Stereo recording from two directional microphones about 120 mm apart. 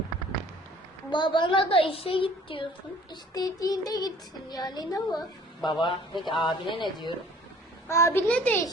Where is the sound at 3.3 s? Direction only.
30° left (ahead or behind).